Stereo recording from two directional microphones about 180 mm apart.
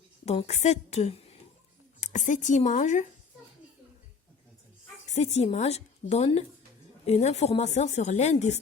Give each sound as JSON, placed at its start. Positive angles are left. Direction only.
{"t": 0.3, "sound": "a woman's voice", "side_deg": 35}
{"t": 5.0, "sound": "a woman's voice", "side_deg": 40}